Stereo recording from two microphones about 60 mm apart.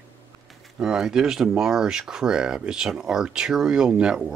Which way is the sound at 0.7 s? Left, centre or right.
Centre.